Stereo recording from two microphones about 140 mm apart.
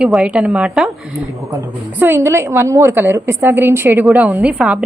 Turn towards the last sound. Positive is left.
turn(degrees=-5)  # may be behind; listen again after turning